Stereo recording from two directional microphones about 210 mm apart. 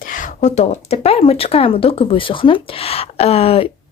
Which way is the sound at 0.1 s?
35° left (ahead or behind).